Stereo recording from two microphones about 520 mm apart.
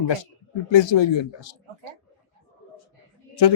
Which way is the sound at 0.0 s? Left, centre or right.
Left.